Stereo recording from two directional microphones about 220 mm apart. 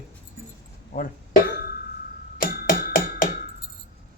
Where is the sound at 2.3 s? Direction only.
40° left (ahead or behind).